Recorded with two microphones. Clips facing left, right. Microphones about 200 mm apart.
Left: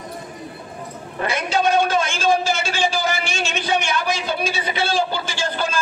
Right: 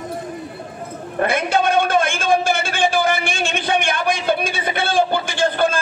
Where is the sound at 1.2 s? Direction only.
55° right (ahead or behind).